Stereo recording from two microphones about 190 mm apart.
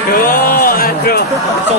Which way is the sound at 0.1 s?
50° left (ahead or behind).